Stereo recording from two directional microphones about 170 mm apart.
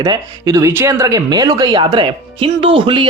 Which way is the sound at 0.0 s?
20° right (ahead or behind).